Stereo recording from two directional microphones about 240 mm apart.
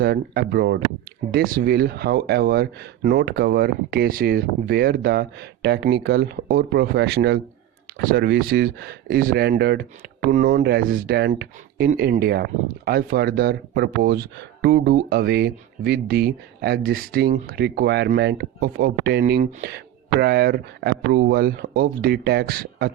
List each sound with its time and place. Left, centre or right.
0.0 s speech: right